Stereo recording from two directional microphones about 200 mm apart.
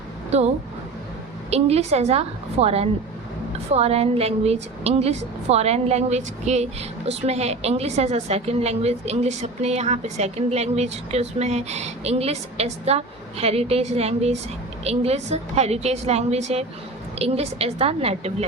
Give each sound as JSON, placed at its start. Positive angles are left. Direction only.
{"t": 0.3, "sound": "a woman's voice", "side_deg": -30}